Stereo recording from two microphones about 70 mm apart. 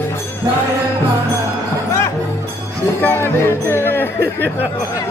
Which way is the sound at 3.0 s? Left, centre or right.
Left.